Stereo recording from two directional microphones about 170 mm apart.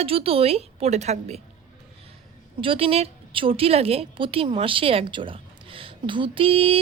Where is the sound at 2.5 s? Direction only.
30° right (ahead or behind).